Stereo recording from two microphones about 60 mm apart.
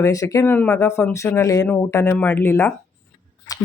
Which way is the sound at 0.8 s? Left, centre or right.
Left.